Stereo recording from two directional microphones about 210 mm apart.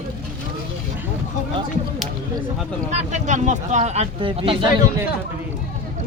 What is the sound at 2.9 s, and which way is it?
Speech, 35° right (ahead or behind).